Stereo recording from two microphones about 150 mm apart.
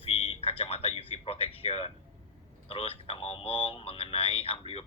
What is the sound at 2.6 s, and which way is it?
Speech, 40° left (ahead or behind).